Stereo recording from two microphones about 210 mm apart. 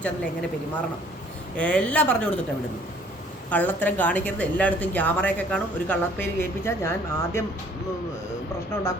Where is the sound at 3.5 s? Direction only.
10° left (ahead or behind).